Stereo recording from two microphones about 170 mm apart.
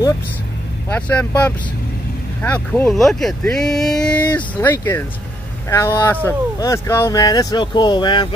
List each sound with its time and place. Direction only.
0.8 s speech: 10° left (ahead or behind); by 8.3 s 25° left (ahead or behind)